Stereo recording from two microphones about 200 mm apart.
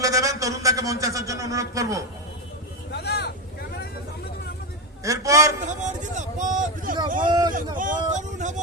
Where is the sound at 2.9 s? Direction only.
55° left (ahead or behind).